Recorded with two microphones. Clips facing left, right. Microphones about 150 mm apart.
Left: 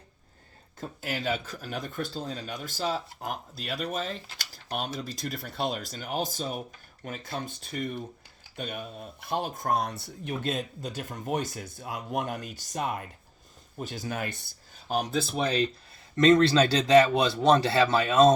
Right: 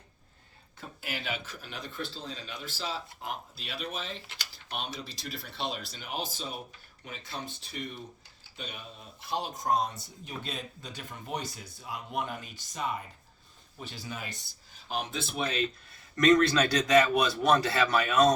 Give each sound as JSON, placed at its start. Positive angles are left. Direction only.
{"t": 0.8, "sound": "a man's voice", "side_deg": 40}
{"t": 10.4, "sound": "a man's voice", "side_deg": 45}